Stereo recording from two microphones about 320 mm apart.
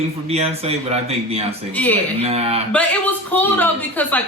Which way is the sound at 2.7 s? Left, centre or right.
Centre.